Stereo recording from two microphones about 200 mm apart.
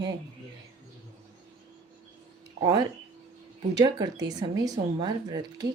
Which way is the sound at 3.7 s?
20° right (ahead or behind).